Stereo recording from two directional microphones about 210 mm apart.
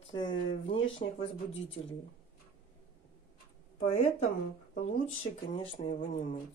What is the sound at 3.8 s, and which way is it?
Speech, 30° left (ahead or behind).